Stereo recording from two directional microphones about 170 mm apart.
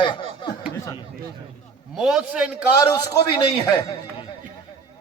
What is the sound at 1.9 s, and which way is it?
Speech, 5° right (ahead or behind).